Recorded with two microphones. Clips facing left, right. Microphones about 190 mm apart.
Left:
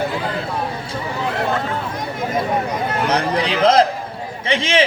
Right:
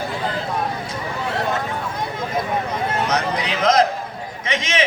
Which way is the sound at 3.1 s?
30° left (ahead or behind).